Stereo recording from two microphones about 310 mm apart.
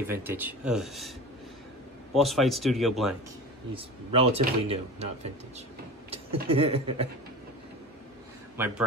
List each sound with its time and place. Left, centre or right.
0.0 s speech: centre
2.1 s speech: centre
3.7 s speech: centre
8.5 s speech: centre